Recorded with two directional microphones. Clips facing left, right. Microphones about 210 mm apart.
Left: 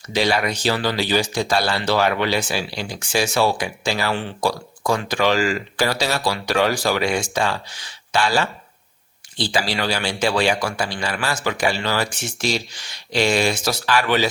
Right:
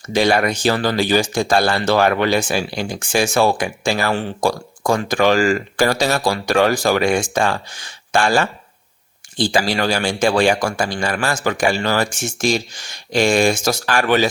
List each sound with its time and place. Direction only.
0.1 s speech: 55° right (ahead or behind)